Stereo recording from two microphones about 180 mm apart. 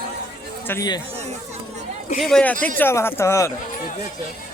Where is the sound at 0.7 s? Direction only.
20° left (ahead or behind).